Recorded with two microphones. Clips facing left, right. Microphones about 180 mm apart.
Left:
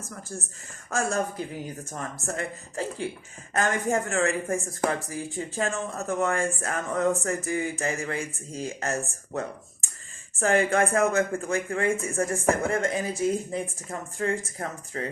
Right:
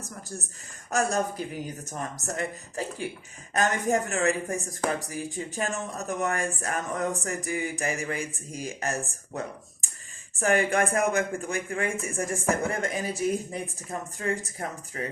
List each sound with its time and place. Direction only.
0.9 s speech: 20° right (ahead or behind)
10.4 s speech: 15° right (ahead or behind)